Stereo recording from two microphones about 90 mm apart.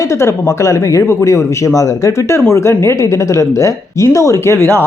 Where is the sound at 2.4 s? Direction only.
30° left (ahead or behind).